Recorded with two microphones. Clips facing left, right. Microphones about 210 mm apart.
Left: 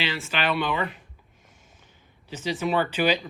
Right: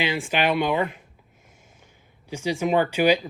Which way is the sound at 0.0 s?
15° right (ahead or behind).